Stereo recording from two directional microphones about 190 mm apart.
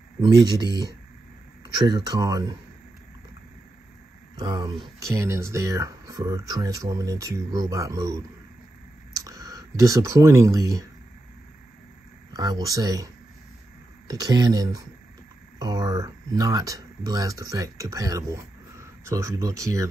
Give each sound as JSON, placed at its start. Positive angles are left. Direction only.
{"t": 0.2, "sound": "speech", "side_deg": -20}
{"t": 4.4, "sound": "speech", "side_deg": -25}
{"t": 12.3, "sound": "speech", "side_deg": -20}